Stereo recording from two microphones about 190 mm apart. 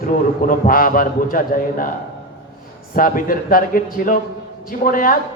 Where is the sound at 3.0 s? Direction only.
45° left (ahead or behind).